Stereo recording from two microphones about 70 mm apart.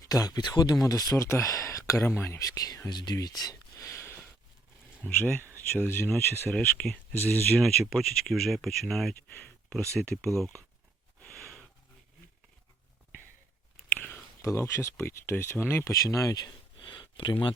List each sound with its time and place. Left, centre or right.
0.0 s speech: left
2.4 s speech: left
2.9 s speech: left
3.2 s speech: left
3.8 s a sound: left
5.0 s speech: left
5.3 s speech: right
5.5 s speech: left
7.6 s speech: centre
9.4 s a sound: centre
9.9 s speech: centre
14.0 s a sound: left
14.4 s speech: left
15.8 s speech: left